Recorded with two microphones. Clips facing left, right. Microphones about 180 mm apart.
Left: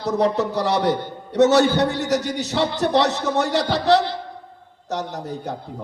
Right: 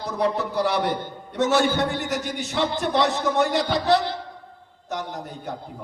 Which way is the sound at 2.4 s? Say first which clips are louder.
Left 3 dB; 70° left (ahead or behind).